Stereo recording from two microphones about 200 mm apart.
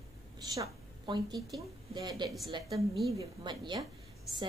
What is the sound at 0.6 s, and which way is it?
A woman's voice, 20° right (ahead or behind).